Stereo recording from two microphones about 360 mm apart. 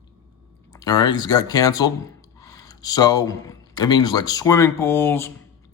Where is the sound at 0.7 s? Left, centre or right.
Centre.